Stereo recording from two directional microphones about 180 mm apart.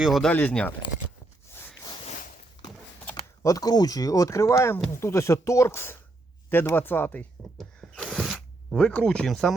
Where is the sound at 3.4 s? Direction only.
20° left (ahead or behind).